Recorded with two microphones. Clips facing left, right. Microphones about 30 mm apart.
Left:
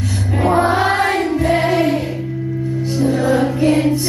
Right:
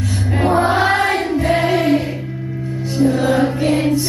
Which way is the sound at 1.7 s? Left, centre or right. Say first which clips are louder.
Even; centre.